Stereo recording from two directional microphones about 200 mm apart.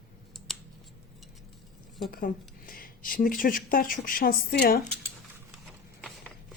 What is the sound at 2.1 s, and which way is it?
Speech, 45° left (ahead or behind).